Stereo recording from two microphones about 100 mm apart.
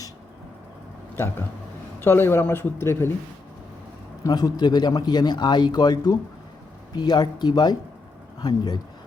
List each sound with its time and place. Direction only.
1.1 s a man's voice: 25° left (ahead or behind)
4.2 s a man's voice: 40° left (ahead or behind)